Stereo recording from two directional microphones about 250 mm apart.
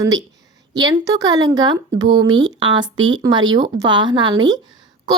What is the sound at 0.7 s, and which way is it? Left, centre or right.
A woman's voice, centre.